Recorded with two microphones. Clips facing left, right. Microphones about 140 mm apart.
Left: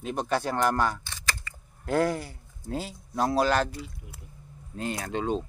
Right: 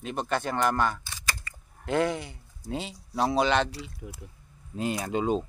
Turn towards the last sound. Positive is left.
turn(degrees=-10)  # may be behind; listen again after turning